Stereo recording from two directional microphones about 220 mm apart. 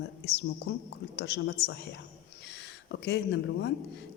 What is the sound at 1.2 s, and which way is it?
Speech, 50° left (ahead or behind).